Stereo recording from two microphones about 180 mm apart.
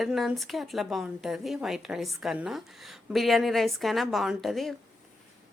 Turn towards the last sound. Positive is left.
turn(degrees=0)  # may be behind; listen again after turning